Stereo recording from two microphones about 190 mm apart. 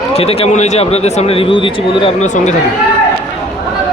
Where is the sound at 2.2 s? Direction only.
40° left (ahead or behind).